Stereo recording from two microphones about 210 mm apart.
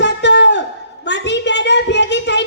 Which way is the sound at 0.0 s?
55° left (ahead or behind).